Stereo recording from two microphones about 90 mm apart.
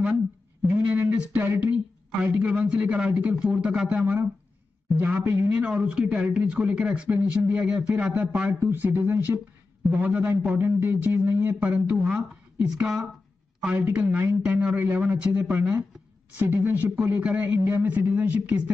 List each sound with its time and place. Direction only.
0.9 s speech: 25° right (ahead or behind)
4.0 s speech: 20° right (ahead or behind); by 13.0 s 5° right (ahead or behind)
13.9 s speech: 20° right (ahead or behind)